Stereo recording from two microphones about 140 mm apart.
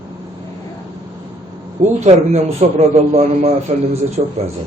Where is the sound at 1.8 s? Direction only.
55° right (ahead or behind).